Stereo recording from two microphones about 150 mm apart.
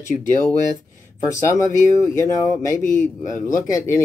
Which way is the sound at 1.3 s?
20° left (ahead or behind).